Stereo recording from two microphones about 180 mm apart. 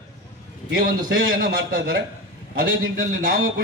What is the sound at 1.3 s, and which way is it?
A man's voice, 55° right (ahead or behind).